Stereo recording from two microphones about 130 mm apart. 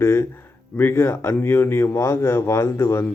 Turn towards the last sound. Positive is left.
turn(degrees=20)  # may be behind; listen again after turning